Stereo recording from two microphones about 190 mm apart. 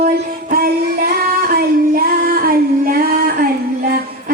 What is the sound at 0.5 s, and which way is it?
Female singing, 50° right (ahead or behind).